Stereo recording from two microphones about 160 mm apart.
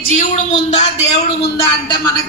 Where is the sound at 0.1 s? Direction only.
50° left (ahead or behind).